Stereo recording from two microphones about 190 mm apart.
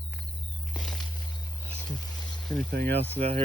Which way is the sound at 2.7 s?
60° right (ahead or behind).